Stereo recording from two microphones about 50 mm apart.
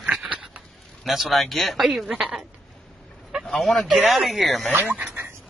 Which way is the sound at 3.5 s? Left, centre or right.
Centre.